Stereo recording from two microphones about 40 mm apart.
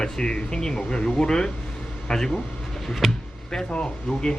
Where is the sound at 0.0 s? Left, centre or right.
Left.